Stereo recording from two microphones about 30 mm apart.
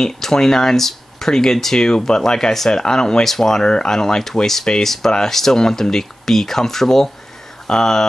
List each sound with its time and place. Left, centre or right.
0.0 s speech: centre
3.3 s speech: centre